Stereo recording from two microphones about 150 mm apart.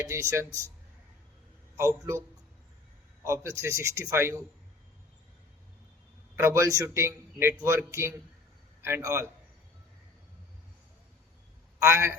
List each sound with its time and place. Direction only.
0.0 s a man's voice: 20° right (ahead or behind)
1.7 s a man's voice: 20° right (ahead or behind)
3.2 s a man's voice: 20° right (ahead or behind)
6.3 s a man's voice: 15° right (ahead or behind)
11.8 s a man's voice: 15° right (ahead or behind)